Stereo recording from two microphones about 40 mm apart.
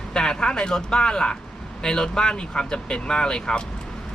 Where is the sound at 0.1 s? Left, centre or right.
Centre.